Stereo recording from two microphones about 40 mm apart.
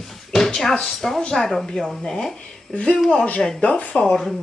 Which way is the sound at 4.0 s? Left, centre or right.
Left.